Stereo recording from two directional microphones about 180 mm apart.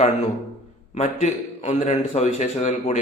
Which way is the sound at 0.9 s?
40° left (ahead or behind).